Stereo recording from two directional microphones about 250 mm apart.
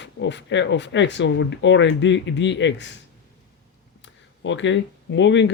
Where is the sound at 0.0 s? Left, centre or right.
Left.